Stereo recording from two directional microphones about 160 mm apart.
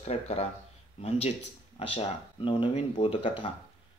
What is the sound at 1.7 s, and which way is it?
Speech, 35° left (ahead or behind).